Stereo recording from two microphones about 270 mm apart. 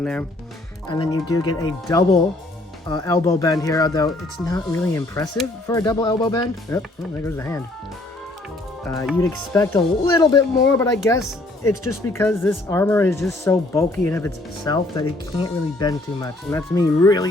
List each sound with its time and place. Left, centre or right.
0.0 s speech: centre
0.9 s speech: centre
8.8 s speech: centre